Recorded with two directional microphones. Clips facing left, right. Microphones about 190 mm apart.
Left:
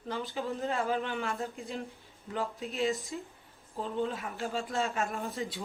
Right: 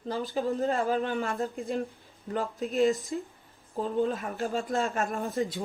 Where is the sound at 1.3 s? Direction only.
55° right (ahead or behind); by 5.3 s 35° right (ahead or behind).